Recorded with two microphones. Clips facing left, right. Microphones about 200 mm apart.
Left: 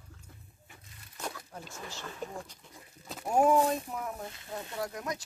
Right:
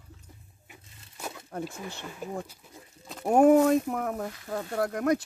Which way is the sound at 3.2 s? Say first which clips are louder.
Right 6 dB; 60° right (ahead or behind).